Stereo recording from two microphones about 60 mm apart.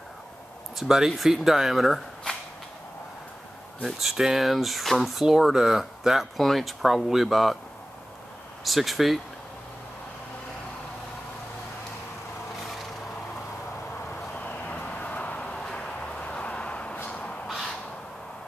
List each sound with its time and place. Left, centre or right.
0.7 s speech: centre
3.8 s speech: centre
5.2 s speech: centre
8.6 s speech: centre
14.0 s vehicle: left
17.5 s crow: centre